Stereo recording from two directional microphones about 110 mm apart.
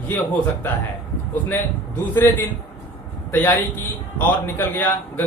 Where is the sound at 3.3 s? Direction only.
15° left (ahead or behind).